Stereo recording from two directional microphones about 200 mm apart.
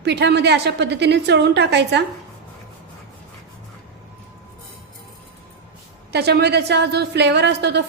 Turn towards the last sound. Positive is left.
turn(degrees=-55)  # may be behind; listen again after turning